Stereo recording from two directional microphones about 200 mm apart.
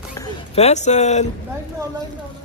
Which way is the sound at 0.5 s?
35° left (ahead or behind).